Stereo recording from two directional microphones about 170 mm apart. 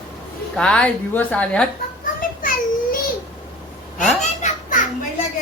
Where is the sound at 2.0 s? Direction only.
55° left (ahead or behind).